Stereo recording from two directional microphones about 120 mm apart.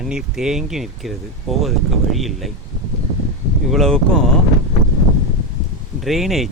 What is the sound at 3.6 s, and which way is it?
Speech, 5° left (ahead or behind).